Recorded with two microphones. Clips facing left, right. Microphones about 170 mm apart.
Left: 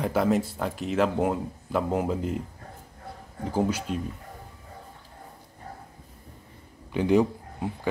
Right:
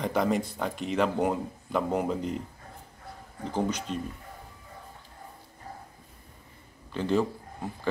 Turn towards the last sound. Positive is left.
turn(degrees=15)  # may be behind; listen again after turning